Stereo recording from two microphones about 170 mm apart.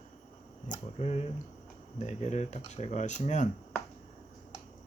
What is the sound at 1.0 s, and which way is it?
Speech, 40° left (ahead or behind).